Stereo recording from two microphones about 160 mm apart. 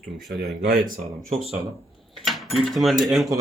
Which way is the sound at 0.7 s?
70° right (ahead or behind).